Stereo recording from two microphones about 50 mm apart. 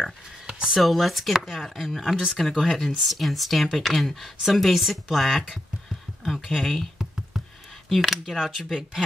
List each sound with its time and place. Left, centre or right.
0.5 s a sound: centre
0.7 s speech: centre
1.3 s chopping: centre
2.6 s speech: centre
6.2 s a sound: centre
7.9 s speech: centre